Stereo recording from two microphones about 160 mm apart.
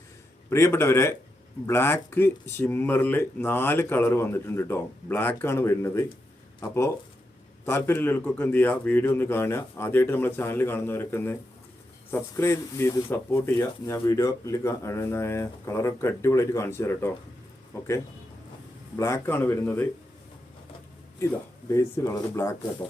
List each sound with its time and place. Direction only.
0.5 s speech: 15° left (ahead or behind)
18.9 s speech: 20° left (ahead or behind)
21.7 s speech: 20° left (ahead or behind)